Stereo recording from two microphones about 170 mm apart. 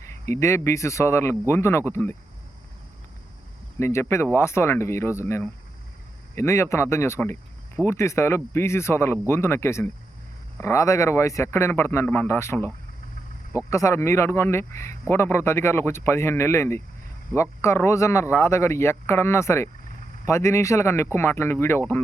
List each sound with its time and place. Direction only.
0.0 s speech: 15° left (ahead or behind)
3.8 s speech: 15° left (ahead or behind)